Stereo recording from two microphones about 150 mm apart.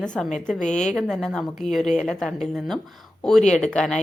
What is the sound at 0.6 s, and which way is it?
Speech, 50° left (ahead or behind).